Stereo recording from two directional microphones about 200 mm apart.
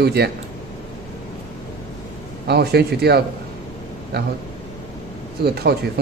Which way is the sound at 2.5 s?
55° right (ahead or behind).